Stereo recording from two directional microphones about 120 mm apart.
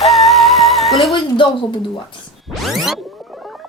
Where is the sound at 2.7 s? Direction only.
Centre (ahead or behind).